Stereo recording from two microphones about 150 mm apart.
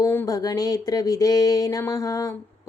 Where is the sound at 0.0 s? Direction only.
15° left (ahead or behind).